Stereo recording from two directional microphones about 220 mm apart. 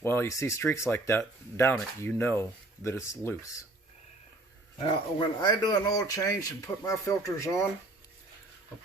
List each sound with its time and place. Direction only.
0.0 s speech: 10° left (ahead or behind)
5.4 s speech: 20° left (ahead or behind)